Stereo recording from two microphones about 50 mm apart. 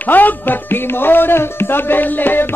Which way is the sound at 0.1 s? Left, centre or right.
Left.